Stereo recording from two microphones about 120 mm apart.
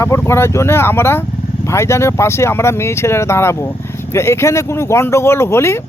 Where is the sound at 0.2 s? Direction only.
20° left (ahead or behind).